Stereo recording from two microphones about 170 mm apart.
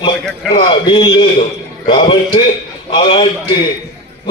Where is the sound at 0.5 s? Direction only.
30° left (ahead or behind).